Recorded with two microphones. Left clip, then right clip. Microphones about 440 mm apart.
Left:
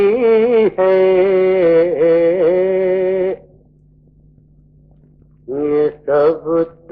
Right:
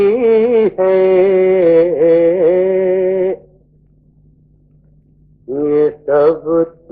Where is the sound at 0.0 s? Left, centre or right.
Left.